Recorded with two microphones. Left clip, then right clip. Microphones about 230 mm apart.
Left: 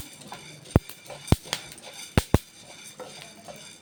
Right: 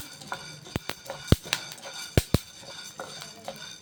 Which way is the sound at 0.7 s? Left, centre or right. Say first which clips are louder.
Left 8 dB; right.